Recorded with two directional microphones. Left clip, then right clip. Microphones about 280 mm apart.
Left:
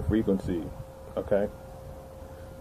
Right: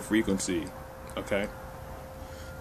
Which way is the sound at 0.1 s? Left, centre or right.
Centre.